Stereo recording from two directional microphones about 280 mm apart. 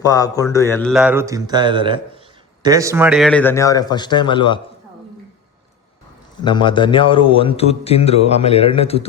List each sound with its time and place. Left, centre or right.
0.0 s a man's voice: centre
6.4 s a man's voice: centre